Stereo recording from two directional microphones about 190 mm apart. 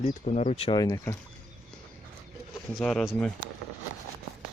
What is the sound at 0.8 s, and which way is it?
Speech, 15° left (ahead or behind).